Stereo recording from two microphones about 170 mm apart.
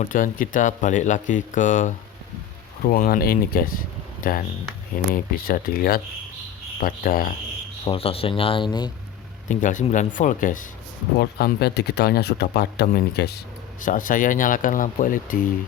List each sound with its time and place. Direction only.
0.0 s speech: 50° left (ahead or behind)
2.8 s speech: 65° left (ahead or behind)
7.9 s speech: 35° left (ahead or behind)
9.5 s speech: 50° left (ahead or behind)
11.2 s speech: 65° left (ahead or behind)
13.8 s speech: 50° left (ahead or behind)